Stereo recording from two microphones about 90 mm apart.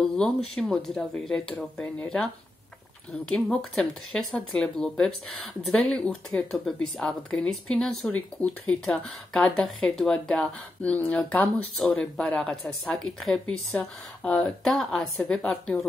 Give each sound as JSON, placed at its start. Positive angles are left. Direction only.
{"t": 0.2, "sound": "speech", "side_deg": 5}
{"t": 3.3, "sound": "speech", "side_deg": 10}